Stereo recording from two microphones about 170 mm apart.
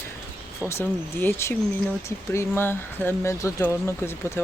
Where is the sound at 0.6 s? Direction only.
15° left (ahead or behind).